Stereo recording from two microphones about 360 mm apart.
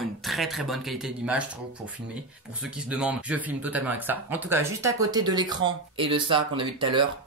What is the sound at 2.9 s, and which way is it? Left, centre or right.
Speech, centre.